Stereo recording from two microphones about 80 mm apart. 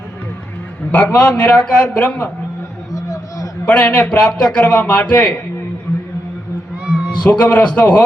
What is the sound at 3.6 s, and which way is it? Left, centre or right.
A man's voice, centre.